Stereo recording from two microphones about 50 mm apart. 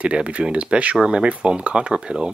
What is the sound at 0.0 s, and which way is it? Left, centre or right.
Speech, right.